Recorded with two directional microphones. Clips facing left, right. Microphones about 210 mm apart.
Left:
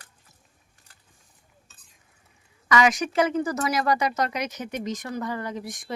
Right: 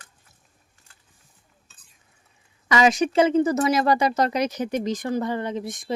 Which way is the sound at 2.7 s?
25° right (ahead or behind).